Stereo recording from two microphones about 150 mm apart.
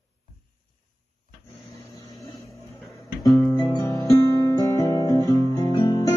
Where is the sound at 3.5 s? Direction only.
30° left (ahead or behind).